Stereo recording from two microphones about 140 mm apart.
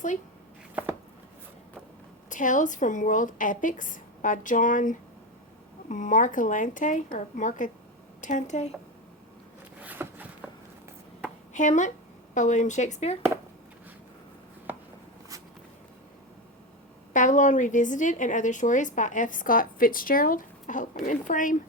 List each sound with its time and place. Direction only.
2.3 s a woman's voice: 65° left (ahead or behind)
9.8 s a sound: 10° right (ahead or behind)
11.5 s a woman's voice: 60° left (ahead or behind)
17.2 s a woman's voice: 65° left (ahead or behind)